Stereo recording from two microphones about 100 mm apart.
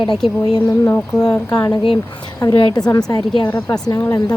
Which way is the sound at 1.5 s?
40° left (ahead or behind).